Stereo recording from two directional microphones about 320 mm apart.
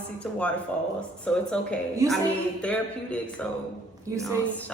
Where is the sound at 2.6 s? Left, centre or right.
Centre.